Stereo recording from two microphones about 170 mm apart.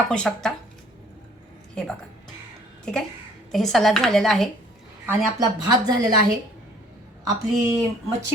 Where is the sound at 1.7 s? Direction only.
5° left (ahead or behind).